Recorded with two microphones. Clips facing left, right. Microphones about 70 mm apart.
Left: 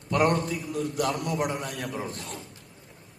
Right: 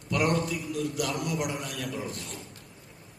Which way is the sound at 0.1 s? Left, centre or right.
Left.